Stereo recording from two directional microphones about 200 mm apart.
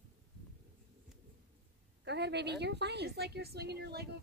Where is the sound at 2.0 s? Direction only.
60° right (ahead or behind).